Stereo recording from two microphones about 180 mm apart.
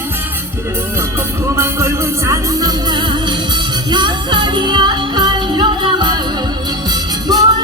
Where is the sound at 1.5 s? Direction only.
15° right (ahead or behind).